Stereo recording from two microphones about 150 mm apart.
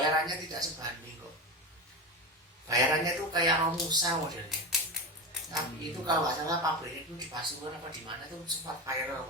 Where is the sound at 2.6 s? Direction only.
25° right (ahead or behind).